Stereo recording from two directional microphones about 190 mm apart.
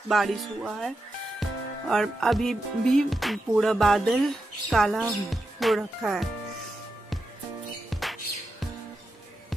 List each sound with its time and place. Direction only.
0.1 s music: centre (ahead or behind)
7.9 s music: centre (ahead or behind)